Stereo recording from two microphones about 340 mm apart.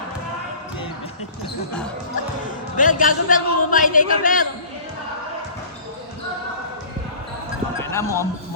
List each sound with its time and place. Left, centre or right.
2.7 s a man's voice: left
7.8 s clip-clop: centre